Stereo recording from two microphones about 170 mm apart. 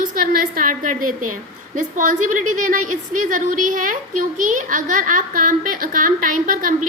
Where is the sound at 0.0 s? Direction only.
55° right (ahead or behind).